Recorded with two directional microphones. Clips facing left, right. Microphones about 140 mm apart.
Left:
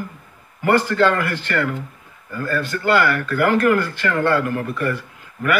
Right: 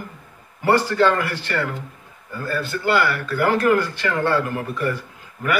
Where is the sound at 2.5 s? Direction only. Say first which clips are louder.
Left 2 dB; 10° right (ahead or behind).